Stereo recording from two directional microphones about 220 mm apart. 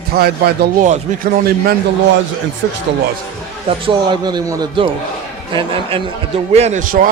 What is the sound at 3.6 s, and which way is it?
A man's voice, 20° right (ahead or behind).